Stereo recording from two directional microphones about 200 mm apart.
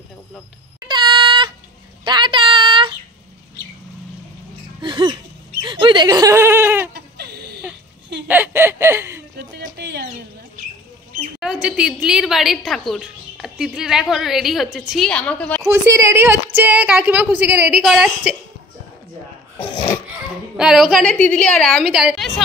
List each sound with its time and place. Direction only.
0.7 s a sound: 20° right (ahead or behind)
4.8 s laughter: 25° right (ahead or behind)
6.9 s whimper: 55° right (ahead or behind)
8.3 s snicker: 10° right (ahead or behind)
9.8 s a sound: 55° right (ahead or behind)
11.3 s a woman's voice: 5° right (ahead or behind)
15.6 s a woman's voice: 10° right (ahead or behind)
20.5 s a woman's voice: 5° right (ahead or behind)